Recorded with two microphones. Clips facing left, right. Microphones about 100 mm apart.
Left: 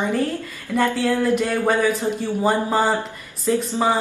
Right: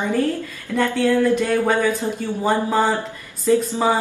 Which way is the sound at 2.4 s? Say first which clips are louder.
Right 1 dB; 5° left (ahead or behind).